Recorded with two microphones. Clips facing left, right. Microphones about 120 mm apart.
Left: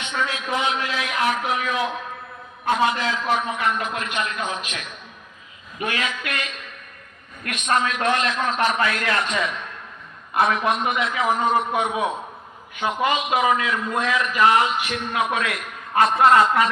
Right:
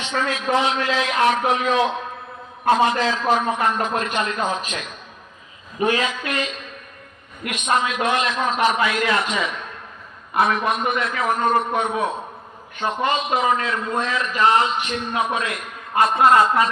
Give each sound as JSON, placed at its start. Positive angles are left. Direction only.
{"t": 0.3, "sound": "a man's voice", "side_deg": -30}
{"t": 5.8, "sound": "a man's voice", "side_deg": -30}
{"t": 7.4, "sound": "a man's voice", "side_deg": -10}
{"t": 14.0, "sound": "a man's voice", "side_deg": -30}